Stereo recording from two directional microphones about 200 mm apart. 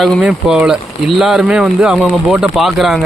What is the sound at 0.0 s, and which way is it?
A man's voice, centre (ahead or behind).